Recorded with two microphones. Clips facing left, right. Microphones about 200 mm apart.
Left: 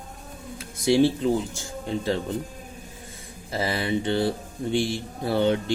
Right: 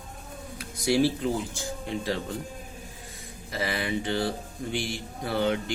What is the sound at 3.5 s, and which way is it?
Speech, 30° left (ahead or behind).